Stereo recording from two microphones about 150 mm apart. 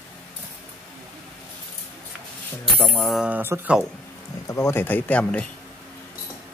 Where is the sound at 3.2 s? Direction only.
15° right (ahead or behind).